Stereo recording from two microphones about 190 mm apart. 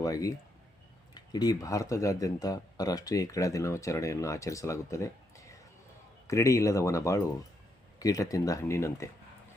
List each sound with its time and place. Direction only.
0.0 s speech: 20° left (ahead or behind)